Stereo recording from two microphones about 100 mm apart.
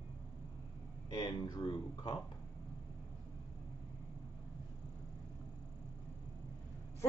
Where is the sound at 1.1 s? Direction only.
45° left (ahead or behind).